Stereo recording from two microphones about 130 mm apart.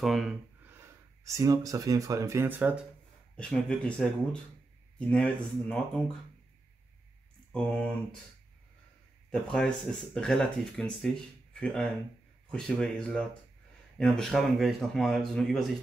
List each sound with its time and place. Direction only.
0.0 s speech: centre (ahead or behind)
0.7 s speech: 20° right (ahead or behind)
3.3 s speech: 10° left (ahead or behind)
7.5 s speech: 10° left (ahead or behind)
9.3 s speech: 5° left (ahead or behind)